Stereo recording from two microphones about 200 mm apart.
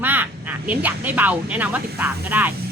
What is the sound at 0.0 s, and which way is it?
Speech, 10° right (ahead or behind).